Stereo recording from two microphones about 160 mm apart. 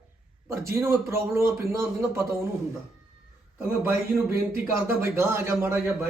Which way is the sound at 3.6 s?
10° right (ahead or behind).